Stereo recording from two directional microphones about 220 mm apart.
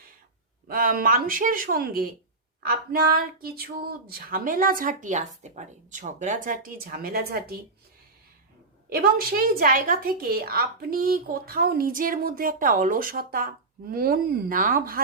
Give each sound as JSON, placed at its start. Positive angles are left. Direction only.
{"t": 0.7, "sound": "speech", "side_deg": -40}
{"t": 8.9, "sound": "speech", "side_deg": -40}